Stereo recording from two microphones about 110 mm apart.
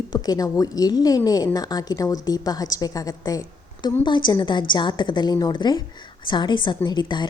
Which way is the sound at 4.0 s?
45° left (ahead or behind).